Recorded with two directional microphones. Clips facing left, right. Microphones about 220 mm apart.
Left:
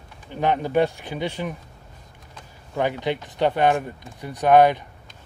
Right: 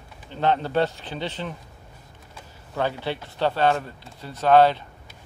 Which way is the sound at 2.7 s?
15° left (ahead or behind).